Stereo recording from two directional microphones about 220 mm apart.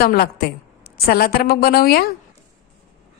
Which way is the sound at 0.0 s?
45° left (ahead or behind).